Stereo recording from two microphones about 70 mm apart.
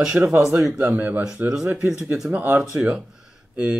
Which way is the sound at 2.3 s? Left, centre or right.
Right.